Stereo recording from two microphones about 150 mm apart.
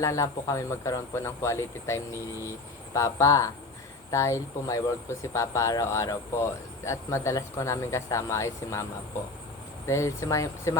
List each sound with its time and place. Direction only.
0.0 s speech: 20° left (ahead or behind)